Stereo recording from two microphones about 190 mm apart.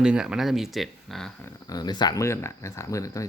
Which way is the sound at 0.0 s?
5° right (ahead or behind).